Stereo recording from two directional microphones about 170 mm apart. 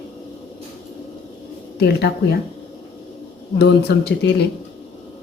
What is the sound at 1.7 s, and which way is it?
Speech, 75° left (ahead or behind).